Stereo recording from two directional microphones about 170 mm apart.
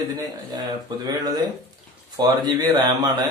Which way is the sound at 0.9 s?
25° right (ahead or behind).